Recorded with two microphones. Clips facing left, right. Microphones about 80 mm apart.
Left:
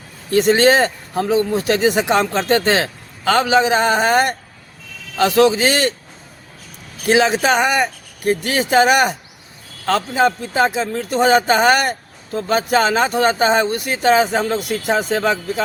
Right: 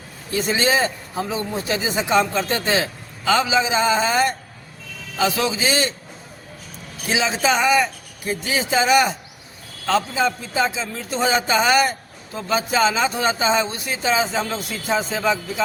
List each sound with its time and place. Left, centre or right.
0.3 s speech: left
7.1 s a man's voice: left